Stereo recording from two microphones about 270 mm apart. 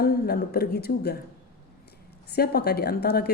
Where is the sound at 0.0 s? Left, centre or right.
Left.